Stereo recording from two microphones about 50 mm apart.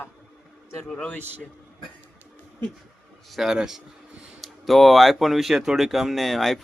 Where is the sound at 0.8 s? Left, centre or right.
Centre.